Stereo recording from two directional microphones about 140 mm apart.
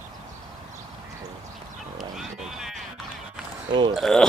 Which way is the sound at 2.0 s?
Centre (ahead or behind).